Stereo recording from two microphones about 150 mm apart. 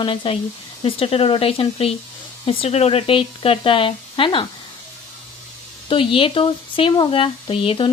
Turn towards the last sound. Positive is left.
turn(degrees=40)  # may be behind; listen again after turning